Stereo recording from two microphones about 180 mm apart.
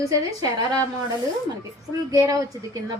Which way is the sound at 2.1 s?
20° right (ahead or behind).